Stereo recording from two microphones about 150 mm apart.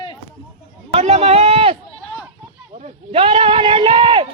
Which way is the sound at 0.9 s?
45° right (ahead or behind).